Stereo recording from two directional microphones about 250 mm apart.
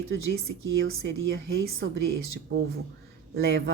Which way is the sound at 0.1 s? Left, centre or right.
Right.